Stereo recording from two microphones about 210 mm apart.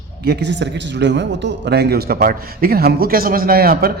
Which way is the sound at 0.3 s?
55° right (ahead or behind).